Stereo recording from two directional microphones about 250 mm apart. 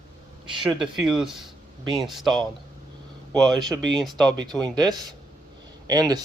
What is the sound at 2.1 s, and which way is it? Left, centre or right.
Speech, centre.